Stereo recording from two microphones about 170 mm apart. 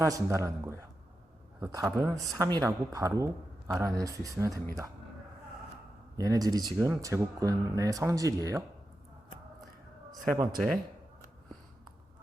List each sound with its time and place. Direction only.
0.0 s speech: 20° right (ahead or behind)
6.1 s speech: 20° right (ahead or behind)
10.1 s a man's voice: 20° right (ahead or behind)